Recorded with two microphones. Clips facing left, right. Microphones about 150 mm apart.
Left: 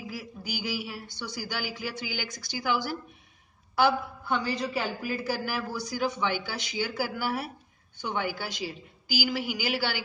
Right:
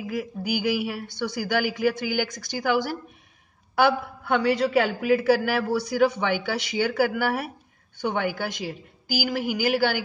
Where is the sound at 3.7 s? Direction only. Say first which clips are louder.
Right 3 dB; 60° right (ahead or behind).